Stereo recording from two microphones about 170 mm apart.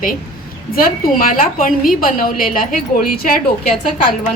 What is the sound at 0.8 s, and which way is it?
A woman's voice, 55° left (ahead or behind).